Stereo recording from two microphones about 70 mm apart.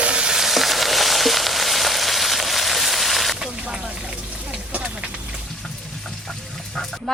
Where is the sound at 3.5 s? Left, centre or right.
Centre.